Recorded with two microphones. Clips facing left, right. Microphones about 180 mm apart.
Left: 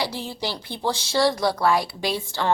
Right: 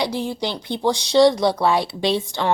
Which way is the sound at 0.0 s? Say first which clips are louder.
Right 5 dB; 15° right (ahead or behind).